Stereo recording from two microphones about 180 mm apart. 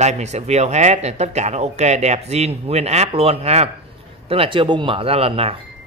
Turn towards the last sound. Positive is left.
turn(degrees=-30)  # may be behind; listen again after turning